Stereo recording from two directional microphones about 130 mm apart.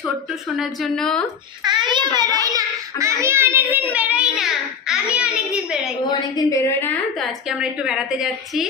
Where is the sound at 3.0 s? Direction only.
25° right (ahead or behind).